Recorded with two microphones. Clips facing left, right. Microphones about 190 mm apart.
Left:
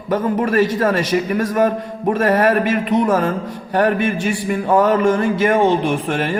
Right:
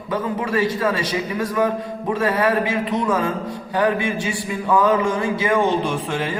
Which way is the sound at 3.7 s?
65° left (ahead or behind).